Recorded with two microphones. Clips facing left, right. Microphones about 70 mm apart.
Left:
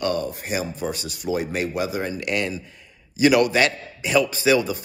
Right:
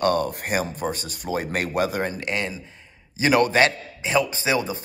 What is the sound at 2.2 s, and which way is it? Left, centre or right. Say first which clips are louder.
A man's voice: left 2 dB; right.